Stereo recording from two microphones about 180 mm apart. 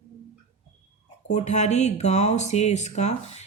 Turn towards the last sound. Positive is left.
turn(degrees=40)  # may be behind; listen again after turning